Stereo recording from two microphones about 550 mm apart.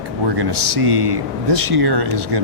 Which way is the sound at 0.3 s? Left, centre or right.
Right.